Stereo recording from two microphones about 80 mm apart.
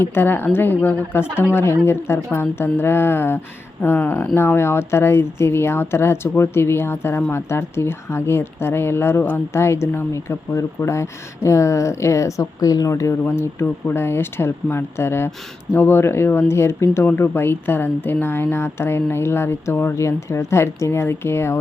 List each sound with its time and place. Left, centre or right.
0.0 s a woman's voice: left